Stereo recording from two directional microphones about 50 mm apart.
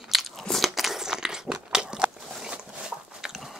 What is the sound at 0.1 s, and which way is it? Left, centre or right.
Biting, centre.